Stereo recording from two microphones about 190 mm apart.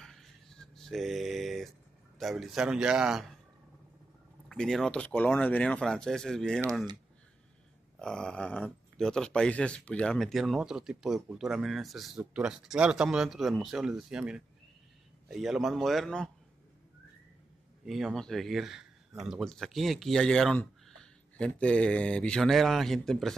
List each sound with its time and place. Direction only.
0.0 s a sound: centre (ahead or behind)
2.1 s speech: centre (ahead or behind)
4.5 s speech: centre (ahead or behind)
8.0 s speech: 5° left (ahead or behind)
17.8 s speech: centre (ahead or behind)